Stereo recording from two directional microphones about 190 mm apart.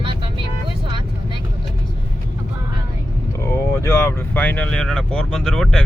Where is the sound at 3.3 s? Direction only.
15° left (ahead or behind).